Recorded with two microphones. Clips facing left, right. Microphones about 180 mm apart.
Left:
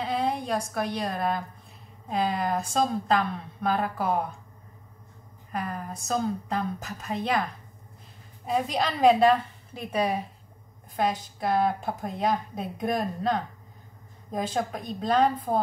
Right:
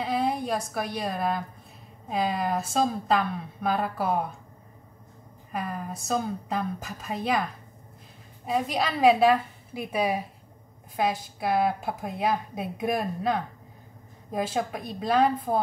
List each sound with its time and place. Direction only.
0.0 s a woman's voice: 5° right (ahead or behind)
5.5 s a woman's voice: 10° right (ahead or behind)
8.5 s a woman's voice: centre (ahead or behind)